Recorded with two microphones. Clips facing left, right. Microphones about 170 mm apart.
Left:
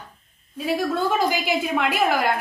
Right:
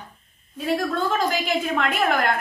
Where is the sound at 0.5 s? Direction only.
Centre (ahead or behind).